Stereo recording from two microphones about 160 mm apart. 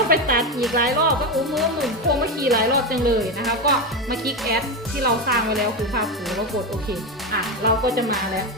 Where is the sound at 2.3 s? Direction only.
70° right (ahead or behind).